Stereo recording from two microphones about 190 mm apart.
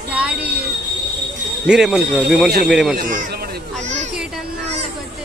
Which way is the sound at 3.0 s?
50° right (ahead or behind).